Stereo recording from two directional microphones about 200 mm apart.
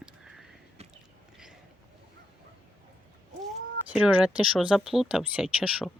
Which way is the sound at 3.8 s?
5° right (ahead or behind).